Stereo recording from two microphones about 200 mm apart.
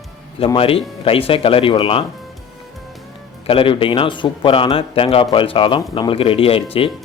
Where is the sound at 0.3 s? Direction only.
25° left (ahead or behind).